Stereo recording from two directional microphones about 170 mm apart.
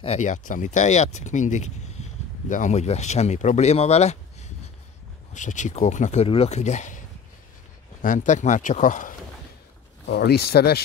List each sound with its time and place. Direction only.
0.0 s speech: 40° left (ahead or behind)
6.2 s speech: 35° left (ahead or behind)
8.0 s speech: 50° left (ahead or behind)
10.0 s speech: 70° left (ahead or behind)